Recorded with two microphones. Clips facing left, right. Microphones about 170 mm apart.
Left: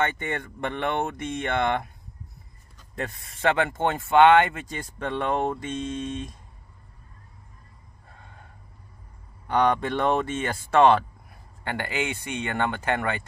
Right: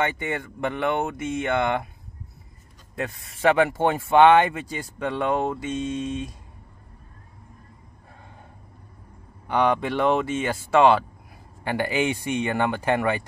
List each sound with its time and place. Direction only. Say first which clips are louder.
0.0 s speech: right 1 dB; 5° right (ahead or behind)
3.0 s speech: right 3 dB; 5° right (ahead or behind)
9.5 s speech: right 1 dB; 5° right (ahead or behind)